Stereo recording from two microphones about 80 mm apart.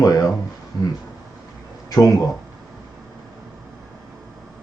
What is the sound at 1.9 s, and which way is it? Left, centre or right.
Speech, left.